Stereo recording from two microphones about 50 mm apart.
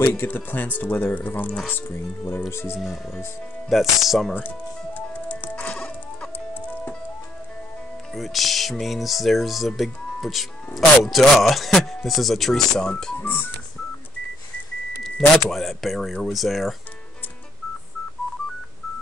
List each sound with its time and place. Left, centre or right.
0.0 s speech: left
3.6 s speech: centre
5.6 s music: left
6.5 s music: left
8.1 s speech: centre
13.2 s telephone dialing: left
15.0 s speech: centre